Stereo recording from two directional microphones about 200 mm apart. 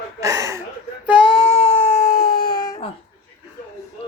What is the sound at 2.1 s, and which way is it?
Baby cry, 45° left (ahead or behind).